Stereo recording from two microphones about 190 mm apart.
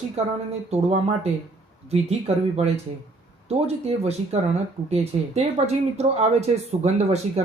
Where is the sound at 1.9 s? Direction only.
35° right (ahead or behind).